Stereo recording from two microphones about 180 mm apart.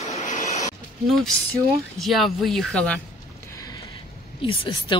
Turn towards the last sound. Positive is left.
turn(degrees=30)  # may be behind; listen again after turning